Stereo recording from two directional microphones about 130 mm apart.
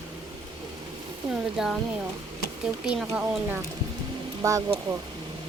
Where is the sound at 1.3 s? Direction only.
5° right (ahead or behind).